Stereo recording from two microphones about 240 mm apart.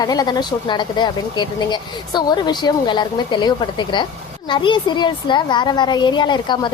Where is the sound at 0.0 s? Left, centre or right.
Centre.